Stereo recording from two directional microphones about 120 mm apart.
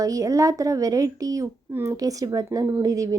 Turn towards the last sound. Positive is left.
turn(degrees=-25)  # may be behind; listen again after turning